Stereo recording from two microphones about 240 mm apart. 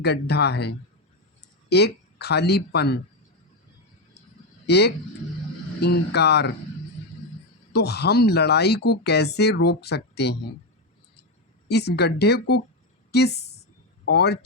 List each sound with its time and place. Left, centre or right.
0.0 s speech: left
4.6 s speech: left
7.7 s speech: left
11.7 s a woman's voice: left